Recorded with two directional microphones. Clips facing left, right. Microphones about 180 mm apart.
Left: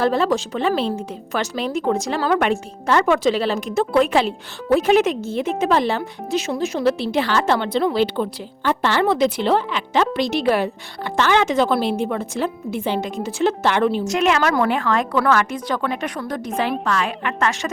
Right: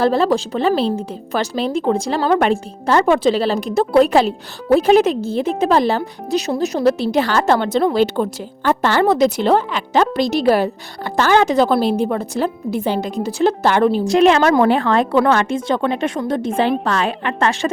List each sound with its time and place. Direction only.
0.0 s speech: 35° right (ahead or behind)